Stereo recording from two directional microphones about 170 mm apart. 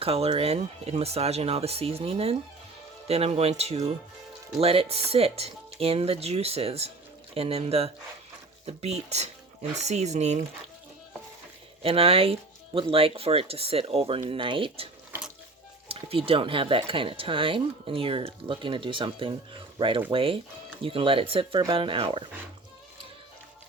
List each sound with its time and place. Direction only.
0.0 s speech: 35° right (ahead or behind)
11.8 s speech: 35° right (ahead or behind)
15.9 s speech: 35° right (ahead or behind)